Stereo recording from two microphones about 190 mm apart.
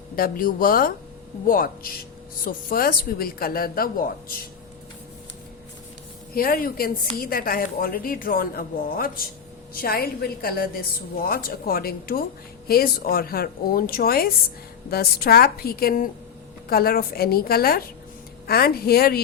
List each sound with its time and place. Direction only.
0.2 s a woman's voice: 50° left (ahead or behind)
6.3 s a woman's voice: 50° left (ahead or behind)